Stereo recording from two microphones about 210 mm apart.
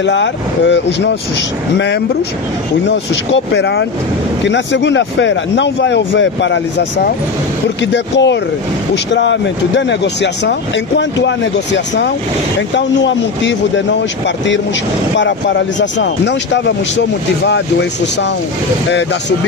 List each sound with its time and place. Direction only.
0.0 s speech: 60° left (ahead or behind)
3.5 s speech: 55° left (ahead or behind)
7.8 s speech: 60° left (ahead or behind)
15.8 s speech: 55° left (ahead or behind)